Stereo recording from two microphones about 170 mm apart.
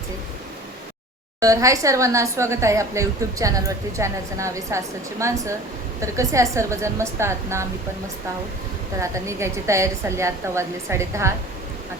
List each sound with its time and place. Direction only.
1.4 s speech: 20° right (ahead or behind)
9.0 s speech: 15° right (ahead or behind)